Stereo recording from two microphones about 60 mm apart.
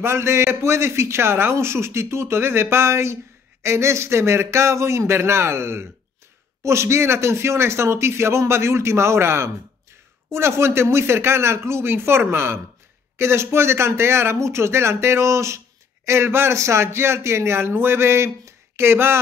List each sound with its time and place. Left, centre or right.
0.0 s a man's voice: right